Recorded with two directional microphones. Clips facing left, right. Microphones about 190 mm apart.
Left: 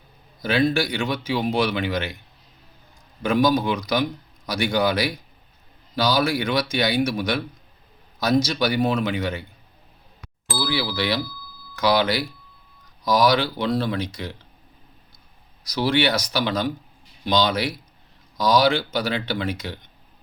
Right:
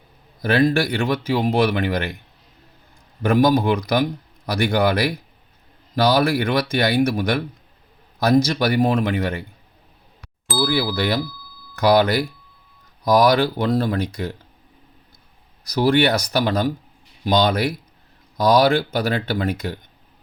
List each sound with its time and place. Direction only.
0.4 s speech: 55° right (ahead or behind)
3.2 s speech: 55° right (ahead or behind)
10.6 s speech: 45° right (ahead or behind)
15.8 s speech: 50° right (ahead or behind)